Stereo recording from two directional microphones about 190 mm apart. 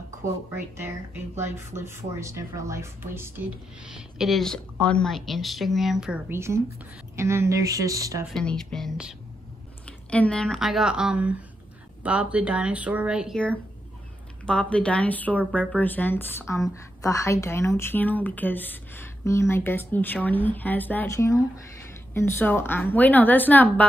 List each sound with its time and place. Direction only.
0.7 s speech: 10° right (ahead or behind)
4.2 s speech: centre (ahead or behind); by 8.3 s 20° right (ahead or behind)
8.3 s speech: 5° left (ahead or behind)
14.4 s a woman's voice: 5° left (ahead or behind)